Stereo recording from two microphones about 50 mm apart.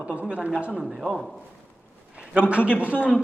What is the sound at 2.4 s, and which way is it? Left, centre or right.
Speech, right.